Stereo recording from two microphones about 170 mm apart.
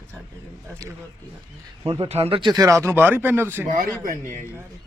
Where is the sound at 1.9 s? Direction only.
35° right (ahead or behind); by 3.7 s 15° right (ahead or behind).